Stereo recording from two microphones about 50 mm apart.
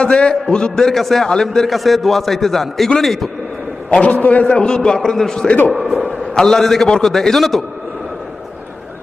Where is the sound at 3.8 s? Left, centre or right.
Left; by 7.6 s centre.